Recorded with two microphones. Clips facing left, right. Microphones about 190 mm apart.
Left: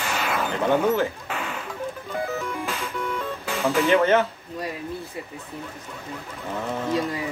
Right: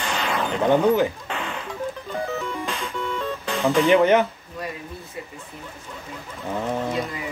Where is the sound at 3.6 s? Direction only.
15° right (ahead or behind).